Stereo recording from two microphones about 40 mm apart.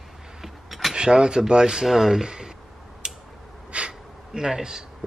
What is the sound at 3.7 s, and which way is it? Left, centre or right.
Gasp, right.